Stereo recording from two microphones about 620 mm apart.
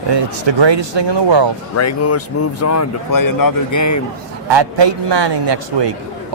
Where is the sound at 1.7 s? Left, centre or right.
Left.